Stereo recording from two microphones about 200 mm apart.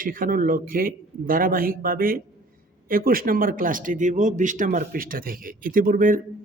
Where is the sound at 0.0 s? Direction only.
45° right (ahead or behind).